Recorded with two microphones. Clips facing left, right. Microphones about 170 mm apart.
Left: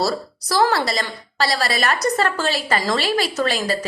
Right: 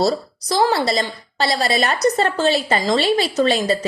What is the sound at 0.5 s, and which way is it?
A woman's voice, 25° right (ahead or behind).